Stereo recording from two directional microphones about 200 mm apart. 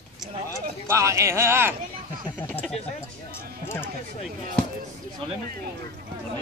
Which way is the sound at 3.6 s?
10° left (ahead or behind).